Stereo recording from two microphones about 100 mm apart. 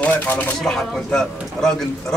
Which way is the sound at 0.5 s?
5° left (ahead or behind).